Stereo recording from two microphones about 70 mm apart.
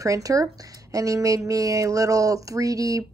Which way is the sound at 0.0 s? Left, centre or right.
Right.